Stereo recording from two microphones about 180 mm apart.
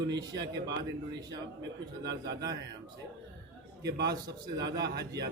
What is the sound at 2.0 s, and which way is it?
Speech, 75° right (ahead or behind).